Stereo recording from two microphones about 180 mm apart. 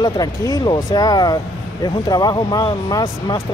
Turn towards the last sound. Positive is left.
turn(degrees=25)  # may be behind; listen again after turning